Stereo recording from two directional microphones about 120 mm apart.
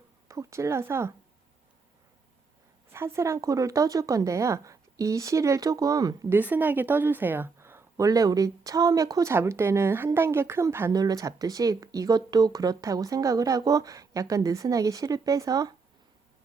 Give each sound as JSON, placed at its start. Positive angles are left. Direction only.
{"t": 0.3, "sound": "speech", "side_deg": -25}
{"t": 2.9, "sound": "speech", "side_deg": -20}
{"t": 6.3, "sound": "speech", "side_deg": -15}